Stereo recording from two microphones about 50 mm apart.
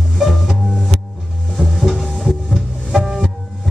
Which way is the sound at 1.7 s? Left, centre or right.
Centre.